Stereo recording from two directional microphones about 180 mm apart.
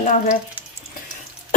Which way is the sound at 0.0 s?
45° left (ahead or behind).